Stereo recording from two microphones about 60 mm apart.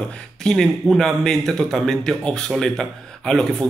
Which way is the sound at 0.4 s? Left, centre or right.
Centre.